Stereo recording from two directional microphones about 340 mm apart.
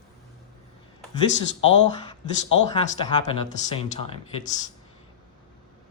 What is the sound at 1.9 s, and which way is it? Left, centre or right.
Speech, centre.